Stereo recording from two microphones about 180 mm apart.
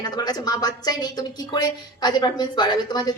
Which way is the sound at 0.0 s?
20° left (ahead or behind).